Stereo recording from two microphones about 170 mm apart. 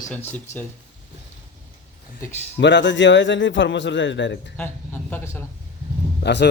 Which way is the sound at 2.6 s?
90° left.